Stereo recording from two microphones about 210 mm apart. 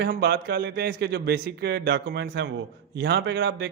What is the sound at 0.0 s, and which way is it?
A man's voice, 50° right (ahead or behind).